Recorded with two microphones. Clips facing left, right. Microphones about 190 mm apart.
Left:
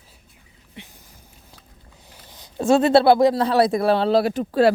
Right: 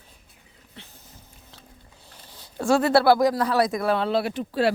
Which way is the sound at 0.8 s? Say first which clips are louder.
Left 5 dB; 15° left (ahead or behind).